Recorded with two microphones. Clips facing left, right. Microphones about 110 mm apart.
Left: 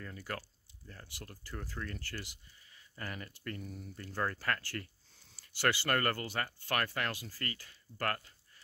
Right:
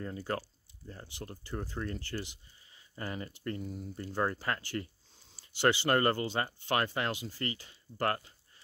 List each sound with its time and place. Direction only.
0.0 s speech: 25° right (ahead or behind)